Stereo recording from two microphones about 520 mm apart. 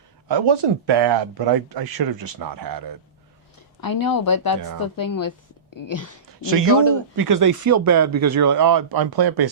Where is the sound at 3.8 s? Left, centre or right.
Left.